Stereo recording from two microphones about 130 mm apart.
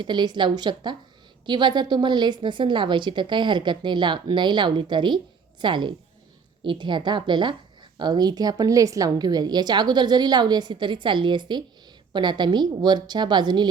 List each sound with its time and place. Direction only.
0.0 s a woman's voice: 35° right (ahead or behind)